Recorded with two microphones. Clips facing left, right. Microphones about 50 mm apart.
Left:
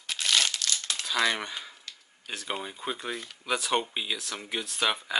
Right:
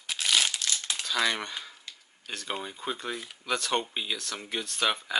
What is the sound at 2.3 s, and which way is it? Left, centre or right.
Speech, centre.